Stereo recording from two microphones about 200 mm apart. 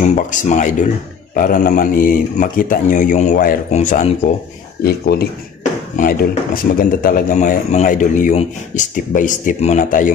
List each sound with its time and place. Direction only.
0.0 s speech: 35° left (ahead or behind)
4.8 s speech: 50° left (ahead or behind)